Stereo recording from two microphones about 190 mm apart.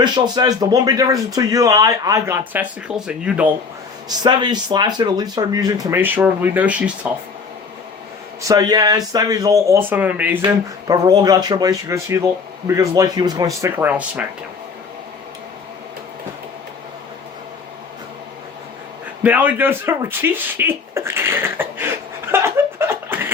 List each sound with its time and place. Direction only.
0.0 s speech: 20° right (ahead or behind); by 3.5 s 5° right (ahead or behind)
4.2 s speech: 20° right (ahead or behind); by 7.1 s 5° right (ahead or behind)
8.4 s speech: 20° right (ahead or behind)
19.2 s speech: 10° right (ahead or behind)